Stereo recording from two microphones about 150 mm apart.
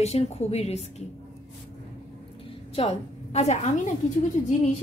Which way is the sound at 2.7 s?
45° left (ahead or behind).